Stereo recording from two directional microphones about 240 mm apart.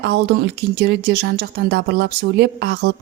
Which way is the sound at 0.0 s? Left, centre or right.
Right.